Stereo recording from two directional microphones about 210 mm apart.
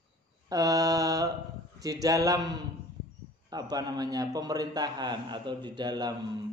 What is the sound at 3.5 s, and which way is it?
A man's voice, 20° right (ahead or behind).